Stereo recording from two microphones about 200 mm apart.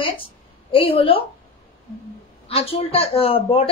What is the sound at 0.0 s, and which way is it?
A woman's voice, 25° left (ahead or behind).